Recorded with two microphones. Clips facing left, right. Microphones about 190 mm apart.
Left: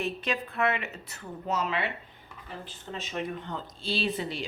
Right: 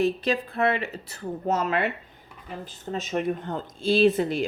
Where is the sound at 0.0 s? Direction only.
35° right (ahead or behind).